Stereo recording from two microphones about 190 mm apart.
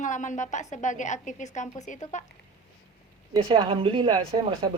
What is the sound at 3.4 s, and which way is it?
Speech, 25° right (ahead or behind).